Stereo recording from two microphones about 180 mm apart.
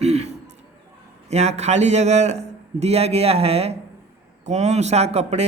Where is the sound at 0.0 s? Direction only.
35° right (ahead or behind).